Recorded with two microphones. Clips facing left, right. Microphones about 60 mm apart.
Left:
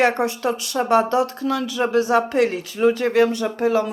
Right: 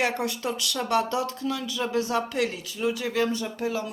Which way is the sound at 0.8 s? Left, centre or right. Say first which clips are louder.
Left 8 dB; left.